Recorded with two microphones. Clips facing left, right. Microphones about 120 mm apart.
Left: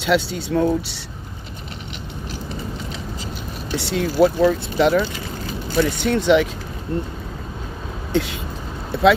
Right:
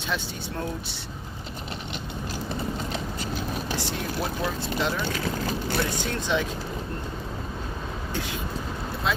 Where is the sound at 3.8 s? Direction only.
75° left (ahead or behind).